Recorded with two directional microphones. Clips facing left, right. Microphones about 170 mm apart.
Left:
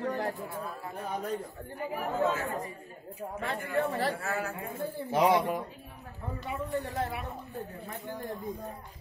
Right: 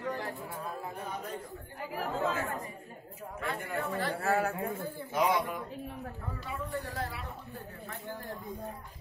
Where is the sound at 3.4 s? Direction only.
30° left (ahead or behind).